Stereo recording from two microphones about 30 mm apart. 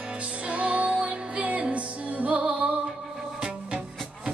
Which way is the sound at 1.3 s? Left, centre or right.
Right.